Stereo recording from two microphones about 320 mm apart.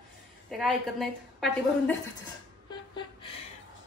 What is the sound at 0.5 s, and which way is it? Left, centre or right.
A woman's voice, centre.